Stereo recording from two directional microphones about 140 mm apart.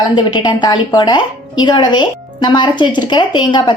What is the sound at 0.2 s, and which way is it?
Speech, 35° left (ahead or behind).